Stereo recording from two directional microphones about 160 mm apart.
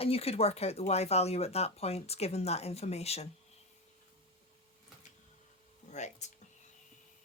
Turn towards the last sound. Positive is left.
turn(degrees=45)  # may be behind; listen again after turning